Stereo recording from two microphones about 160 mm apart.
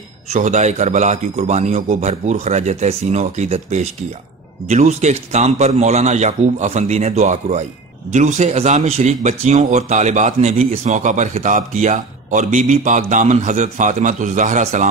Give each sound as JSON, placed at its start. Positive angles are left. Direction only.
{"t": 0.3, "sound": "speech", "side_deg": -50}